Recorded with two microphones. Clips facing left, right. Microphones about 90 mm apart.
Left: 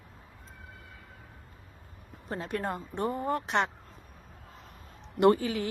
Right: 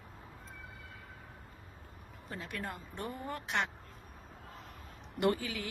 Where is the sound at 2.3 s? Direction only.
35° left (ahead or behind).